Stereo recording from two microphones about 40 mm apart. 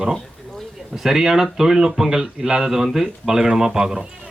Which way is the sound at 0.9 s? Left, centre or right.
Centre.